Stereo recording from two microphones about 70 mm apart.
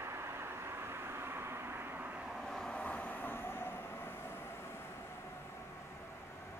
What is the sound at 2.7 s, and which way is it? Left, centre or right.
Vehicle, centre.